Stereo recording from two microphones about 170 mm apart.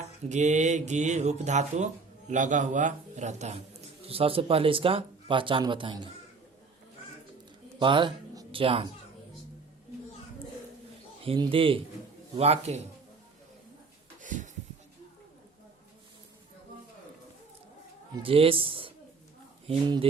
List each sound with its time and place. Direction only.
0.3 s speech: 45° right (ahead or behind); by 6.0 s 30° right (ahead or behind)
7.8 s speech: 30° right (ahead or behind)
11.2 s speech: 30° right (ahead or behind)
14.2 s a sound: 50° right (ahead or behind)
18.2 s speech: 30° right (ahead or behind)